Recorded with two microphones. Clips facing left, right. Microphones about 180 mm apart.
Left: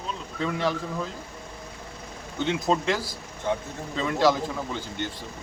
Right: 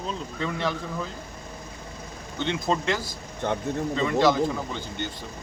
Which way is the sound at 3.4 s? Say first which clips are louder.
Even; 65° right (ahead or behind).